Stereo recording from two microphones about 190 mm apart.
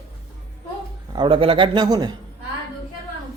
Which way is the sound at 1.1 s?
25° right (ahead or behind).